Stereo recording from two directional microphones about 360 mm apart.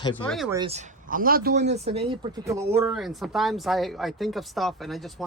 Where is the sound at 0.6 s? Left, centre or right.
Centre.